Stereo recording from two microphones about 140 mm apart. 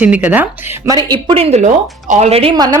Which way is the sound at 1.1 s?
40° right (ahead or behind).